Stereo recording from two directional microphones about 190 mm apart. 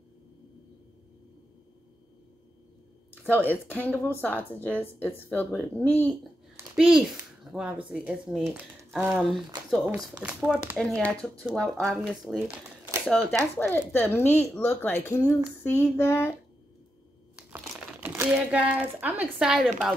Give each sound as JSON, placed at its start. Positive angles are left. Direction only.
{"t": 3.3, "sound": "speech", "side_deg": 10}
{"t": 6.5, "sound": "speech", "side_deg": -10}
{"t": 10.2, "sound": "speech", "side_deg": -5}
{"t": 18.0, "sound": "speech", "side_deg": -10}